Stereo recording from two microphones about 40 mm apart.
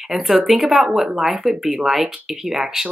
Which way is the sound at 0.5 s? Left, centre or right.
Centre.